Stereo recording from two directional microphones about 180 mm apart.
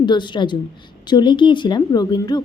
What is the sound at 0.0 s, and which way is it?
A woman's voice, 25° left (ahead or behind).